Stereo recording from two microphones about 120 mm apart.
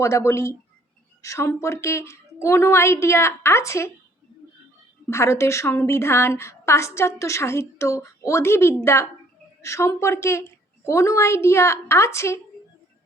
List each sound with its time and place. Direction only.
0.0 s a woman's voice: 25° left (ahead or behind)
5.0 s a woman's voice: 25° left (ahead or behind)